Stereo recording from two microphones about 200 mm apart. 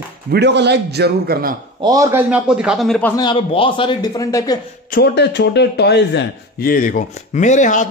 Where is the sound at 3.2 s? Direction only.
25° left (ahead or behind).